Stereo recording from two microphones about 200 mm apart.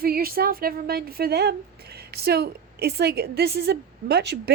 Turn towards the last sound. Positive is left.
turn(degrees=-55)  # may be behind; listen again after turning